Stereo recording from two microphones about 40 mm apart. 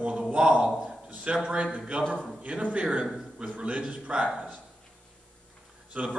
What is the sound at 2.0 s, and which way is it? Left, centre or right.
Speech, left.